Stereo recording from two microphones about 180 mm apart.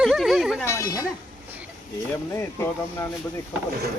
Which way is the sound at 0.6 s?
20° left (ahead or behind).